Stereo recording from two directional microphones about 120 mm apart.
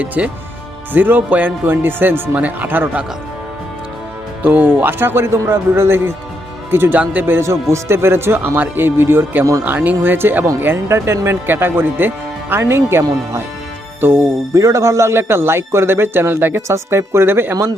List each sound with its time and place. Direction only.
0.0 s a man's voice: 10° right (ahead or behind)
4.4 s speech: 15° right (ahead or behind)